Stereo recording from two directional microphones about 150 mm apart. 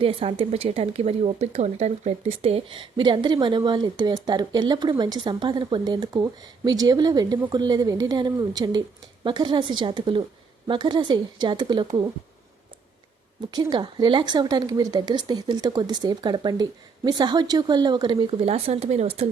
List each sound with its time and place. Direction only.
0.0 s speech: 40° right (ahead or behind)
13.5 s speech: 25° right (ahead or behind); by 19.3 s 45° right (ahead or behind)